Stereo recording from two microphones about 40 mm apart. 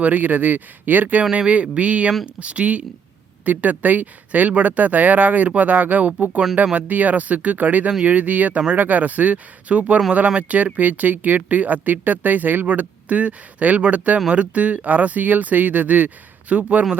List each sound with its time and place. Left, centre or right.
0.0 s speech: right
1.2 s speech: right